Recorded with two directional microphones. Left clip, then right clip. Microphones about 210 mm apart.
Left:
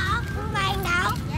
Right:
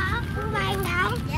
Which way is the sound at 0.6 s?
50° left (ahead or behind).